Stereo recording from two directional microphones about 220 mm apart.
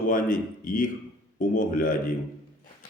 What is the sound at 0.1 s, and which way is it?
Speech, 40° left (ahead or behind).